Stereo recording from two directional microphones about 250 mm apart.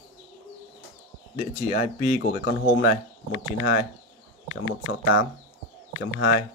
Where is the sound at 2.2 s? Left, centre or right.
Left.